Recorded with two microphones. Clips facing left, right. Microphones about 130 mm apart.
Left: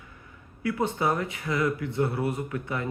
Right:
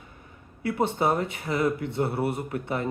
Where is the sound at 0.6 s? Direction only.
30° right (ahead or behind).